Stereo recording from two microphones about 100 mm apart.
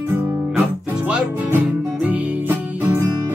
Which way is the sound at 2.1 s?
20° right (ahead or behind).